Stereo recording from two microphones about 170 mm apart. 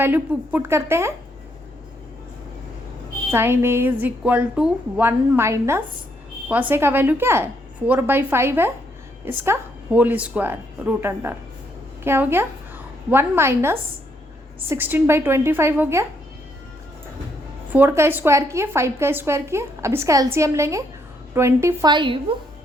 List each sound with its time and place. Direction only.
0.0 s a woman's voice: 10° right (ahead or behind)
3.3 s a woman's voice: 15° right (ahead or behind)
17.7 s a woman's voice: 15° right (ahead or behind)